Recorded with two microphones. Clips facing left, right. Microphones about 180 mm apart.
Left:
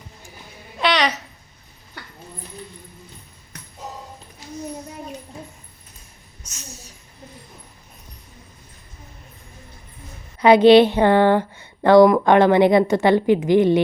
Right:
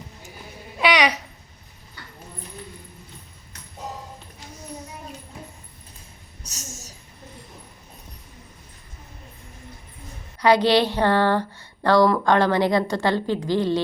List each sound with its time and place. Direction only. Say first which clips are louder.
0.8 s babbling: even; 10° right (ahead or behind)
6.5 s a sound: right 1 dB; 45° right (ahead or behind)
10.4 s speech: left 7 dB; 20° left (ahead or behind)